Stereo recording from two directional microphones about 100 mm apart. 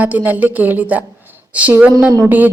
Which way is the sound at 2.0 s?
30° right (ahead or behind).